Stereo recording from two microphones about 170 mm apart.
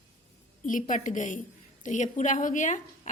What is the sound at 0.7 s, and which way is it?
A woman's voice, 50° left (ahead or behind).